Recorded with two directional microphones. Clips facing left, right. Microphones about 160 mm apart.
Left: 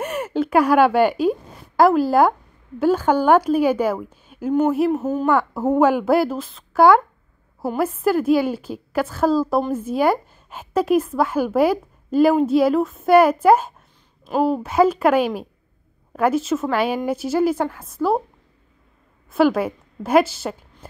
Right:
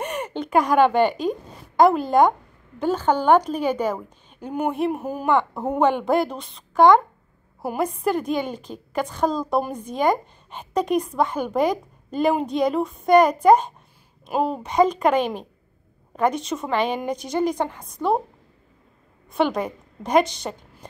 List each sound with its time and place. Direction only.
0.0 s a sound: 5° left (ahead or behind)
1.8 s a woman's voice: 5° left (ahead or behind)
5.0 s a woman's voice: 10° right (ahead or behind)
5.3 s a woman's voice: 5° left (ahead or behind)
19.3 s a woman's voice: 5° left (ahead or behind)